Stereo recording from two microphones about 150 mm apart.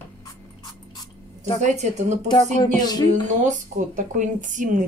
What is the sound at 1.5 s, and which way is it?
Speech, 50° right (ahead or behind).